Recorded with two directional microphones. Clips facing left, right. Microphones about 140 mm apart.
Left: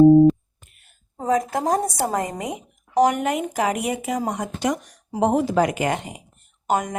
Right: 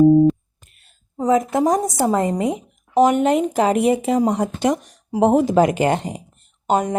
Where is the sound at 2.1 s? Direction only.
30° right (ahead or behind).